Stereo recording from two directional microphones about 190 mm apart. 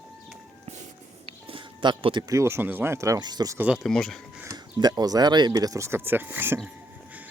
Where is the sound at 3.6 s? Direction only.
Centre (ahead or behind).